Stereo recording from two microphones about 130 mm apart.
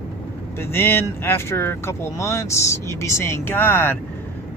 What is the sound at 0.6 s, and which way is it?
Speech, 15° left (ahead or behind).